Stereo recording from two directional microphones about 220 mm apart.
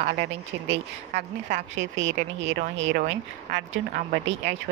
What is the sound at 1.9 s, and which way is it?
Speech, 55° right (ahead or behind).